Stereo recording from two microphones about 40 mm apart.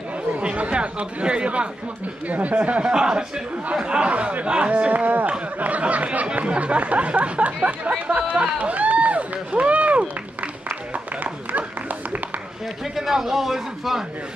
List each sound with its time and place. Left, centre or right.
0.4 s speech: right
2.2 s speech: right
2.9 s speech: centre; by 10.0 s right
12.9 s a man's voice: centre